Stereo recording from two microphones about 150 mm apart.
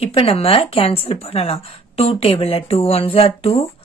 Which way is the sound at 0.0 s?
40° left (ahead or behind).